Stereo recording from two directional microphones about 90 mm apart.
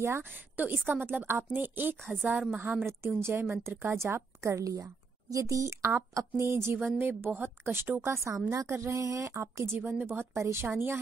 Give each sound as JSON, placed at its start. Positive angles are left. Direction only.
{"t": 0.0, "sound": "a woman's voice", "side_deg": -25}
{"t": 8.5, "sound": "a woman's voice", "side_deg": -35}
{"t": 10.3, "sound": "a woman's voice", "side_deg": -30}